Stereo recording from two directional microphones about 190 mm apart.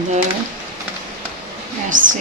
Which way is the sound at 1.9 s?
45° right (ahead or behind).